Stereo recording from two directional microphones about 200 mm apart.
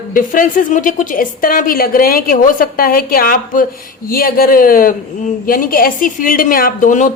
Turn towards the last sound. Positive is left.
turn(degrees=40)  # may be behind; listen again after turning